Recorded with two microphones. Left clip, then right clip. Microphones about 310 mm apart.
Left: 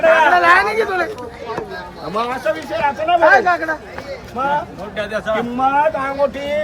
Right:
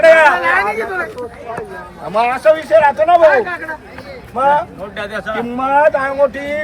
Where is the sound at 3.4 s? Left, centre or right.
Left.